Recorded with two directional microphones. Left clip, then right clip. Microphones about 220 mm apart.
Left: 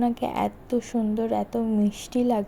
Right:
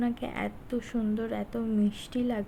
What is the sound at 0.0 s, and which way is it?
A woman's voice, 20° left (ahead or behind).